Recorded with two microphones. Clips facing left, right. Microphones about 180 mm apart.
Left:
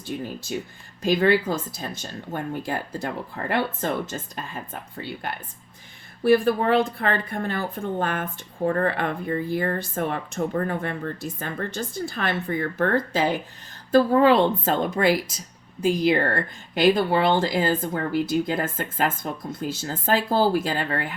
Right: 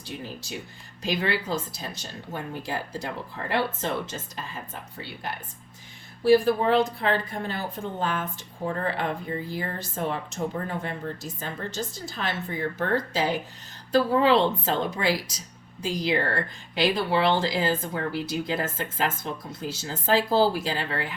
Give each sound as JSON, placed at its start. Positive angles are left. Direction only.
{"t": 1.0, "sound": "speech", "side_deg": 50}